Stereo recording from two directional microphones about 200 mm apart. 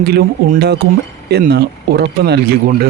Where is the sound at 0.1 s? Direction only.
55° right (ahead or behind).